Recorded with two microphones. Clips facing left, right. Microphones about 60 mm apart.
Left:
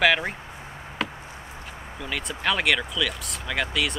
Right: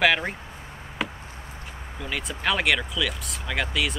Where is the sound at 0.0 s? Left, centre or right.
Centre.